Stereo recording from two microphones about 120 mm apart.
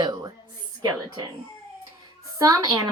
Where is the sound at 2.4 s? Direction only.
30° right (ahead or behind).